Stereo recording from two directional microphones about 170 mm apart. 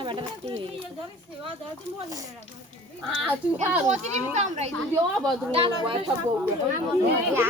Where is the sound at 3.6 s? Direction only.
40° right (ahead or behind).